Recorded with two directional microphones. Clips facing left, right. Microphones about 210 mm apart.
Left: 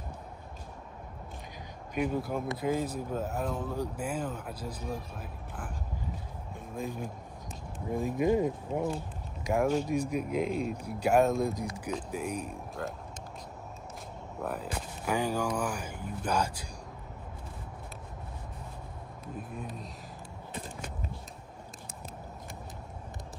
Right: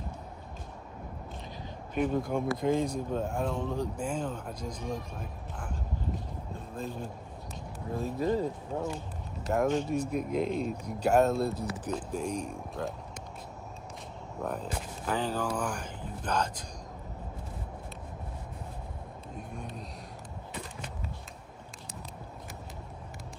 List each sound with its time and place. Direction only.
2.0 s speech: 5° left (ahead or behind)
6.7 s speech: 10° left (ahead or behind)
14.4 s speech: 5° left (ahead or behind)
19.3 s speech: 5° left (ahead or behind)